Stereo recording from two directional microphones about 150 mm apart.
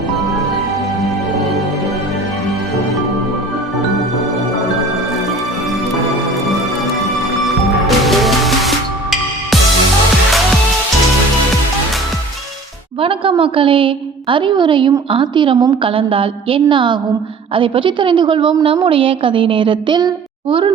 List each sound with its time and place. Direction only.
7.4 s music: centre (ahead or behind)
13.0 s a woman's voice: 35° right (ahead or behind)